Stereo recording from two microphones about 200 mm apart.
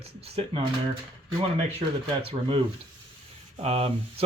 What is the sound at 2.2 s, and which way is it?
Speech, 25° right (ahead or behind).